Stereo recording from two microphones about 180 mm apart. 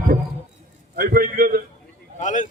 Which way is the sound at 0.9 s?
55° right (ahead or behind).